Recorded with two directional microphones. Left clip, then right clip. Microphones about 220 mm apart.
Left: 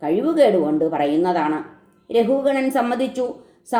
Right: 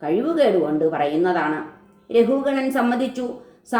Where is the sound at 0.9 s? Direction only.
35° left (ahead or behind).